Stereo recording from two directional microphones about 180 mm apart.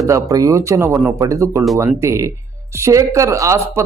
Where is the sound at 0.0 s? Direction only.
20° right (ahead or behind).